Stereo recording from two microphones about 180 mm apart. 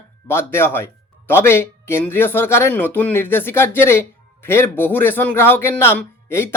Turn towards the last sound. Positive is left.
turn(degrees=10)  # may be behind; listen again after turning